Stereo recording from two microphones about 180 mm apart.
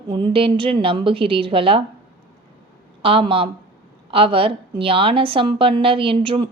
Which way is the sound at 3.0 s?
30° right (ahead or behind).